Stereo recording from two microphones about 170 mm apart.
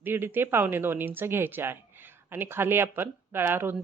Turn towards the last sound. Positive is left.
turn(degrees=-10)  # may be behind; listen again after turning